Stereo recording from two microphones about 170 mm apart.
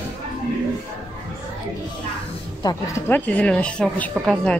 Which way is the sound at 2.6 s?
15° left (ahead or behind).